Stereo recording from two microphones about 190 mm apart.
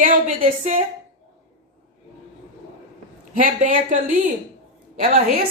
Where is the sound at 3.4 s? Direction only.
45° right (ahead or behind).